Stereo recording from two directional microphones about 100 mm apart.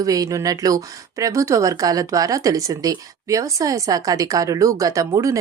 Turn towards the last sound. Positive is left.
turn(degrees=-35)  # may be behind; listen again after turning